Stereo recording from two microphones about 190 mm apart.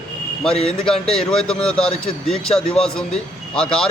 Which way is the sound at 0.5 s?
30° left (ahead or behind).